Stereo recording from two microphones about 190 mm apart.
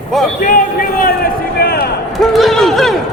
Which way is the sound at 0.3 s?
45° left (ahead or behind).